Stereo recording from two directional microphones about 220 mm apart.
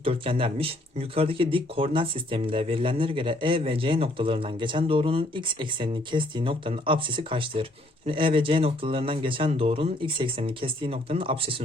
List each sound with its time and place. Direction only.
0.0 s speech: 25° right (ahead or behind)